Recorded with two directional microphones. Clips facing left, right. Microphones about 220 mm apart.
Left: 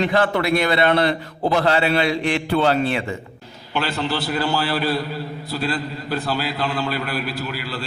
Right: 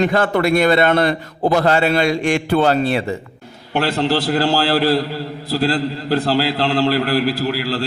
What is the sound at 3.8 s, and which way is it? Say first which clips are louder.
A man's voice: right 7 dB; 90° right.